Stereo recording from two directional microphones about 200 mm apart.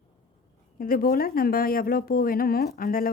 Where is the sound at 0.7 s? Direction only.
45° left (ahead or behind).